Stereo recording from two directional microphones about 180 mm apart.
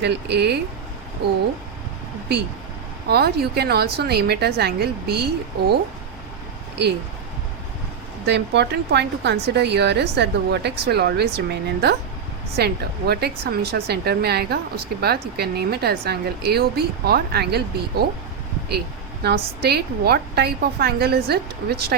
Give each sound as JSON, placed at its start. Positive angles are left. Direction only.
{"t": 0.0, "sound": "a woman's voice", "side_deg": -70}
{"t": 3.1, "sound": "a woman's voice", "side_deg": -65}
{"t": 8.3, "sound": "a woman's voice", "side_deg": -70}
{"t": 19.2, "sound": "a woman's voice", "side_deg": -65}